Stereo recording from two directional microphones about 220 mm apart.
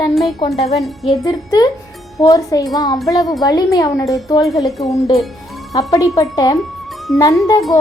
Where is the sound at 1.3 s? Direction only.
15° left (ahead or behind).